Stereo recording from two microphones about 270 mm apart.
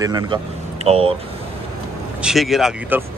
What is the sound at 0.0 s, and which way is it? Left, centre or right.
Speech, centre.